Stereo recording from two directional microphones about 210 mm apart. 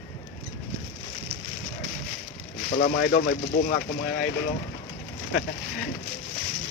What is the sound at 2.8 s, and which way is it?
Speech, 50° left (ahead or behind).